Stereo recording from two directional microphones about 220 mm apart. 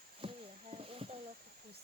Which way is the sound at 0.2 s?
25° right (ahead or behind).